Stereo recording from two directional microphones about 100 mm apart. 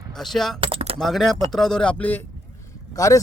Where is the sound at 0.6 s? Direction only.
70° right (ahead or behind).